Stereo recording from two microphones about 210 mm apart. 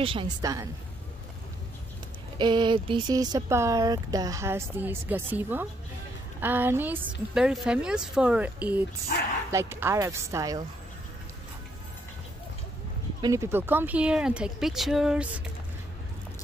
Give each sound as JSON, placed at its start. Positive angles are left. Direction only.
{"t": 0.0, "sound": "a woman's voice", "side_deg": -25}
{"t": 2.3, "sound": "speech", "side_deg": -20}
{"t": 9.1, "sound": "speech", "side_deg": 45}
{"t": 9.5, "sound": "speech", "side_deg": -10}
{"t": 13.2, "sound": "speech", "side_deg": -15}